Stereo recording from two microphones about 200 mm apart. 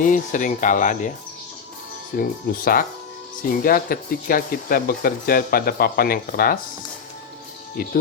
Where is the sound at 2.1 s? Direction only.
45° left (ahead or behind).